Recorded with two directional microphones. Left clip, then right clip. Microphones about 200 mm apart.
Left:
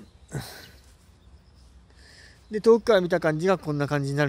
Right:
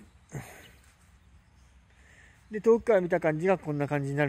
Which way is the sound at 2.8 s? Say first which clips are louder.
Left 4 dB; 15° left (ahead or behind).